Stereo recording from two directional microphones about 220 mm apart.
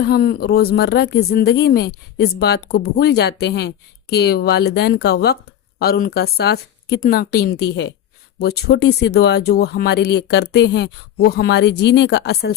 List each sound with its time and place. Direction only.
0.0 s speech: 45° left (ahead or behind)